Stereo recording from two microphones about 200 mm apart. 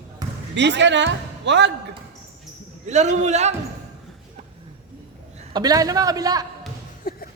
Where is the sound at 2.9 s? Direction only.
35° right (ahead or behind).